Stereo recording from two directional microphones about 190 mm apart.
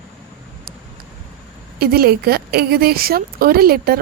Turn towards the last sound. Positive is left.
turn(degrees=-55)  # may be behind; listen again after turning